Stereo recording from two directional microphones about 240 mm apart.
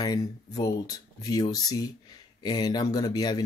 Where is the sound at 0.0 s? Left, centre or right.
Centre.